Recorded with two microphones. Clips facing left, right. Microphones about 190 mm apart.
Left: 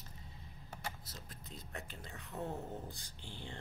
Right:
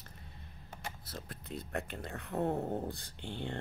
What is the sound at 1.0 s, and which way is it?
Speech, 60° right (ahead or behind).